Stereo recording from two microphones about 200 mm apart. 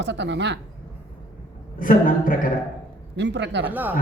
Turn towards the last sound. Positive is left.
turn(degrees=-10)  # may be behind; listen again after turning